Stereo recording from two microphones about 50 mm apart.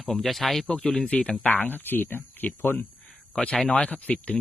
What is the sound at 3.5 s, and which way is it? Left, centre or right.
Speech, centre.